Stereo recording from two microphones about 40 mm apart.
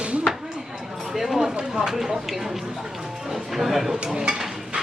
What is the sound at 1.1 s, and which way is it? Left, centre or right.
Speech, centre.